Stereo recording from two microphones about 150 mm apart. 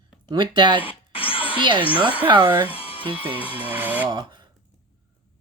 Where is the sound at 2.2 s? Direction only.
30° right (ahead or behind).